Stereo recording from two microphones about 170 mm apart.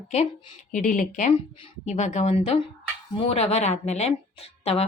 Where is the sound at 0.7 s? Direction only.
50° left (ahead or behind).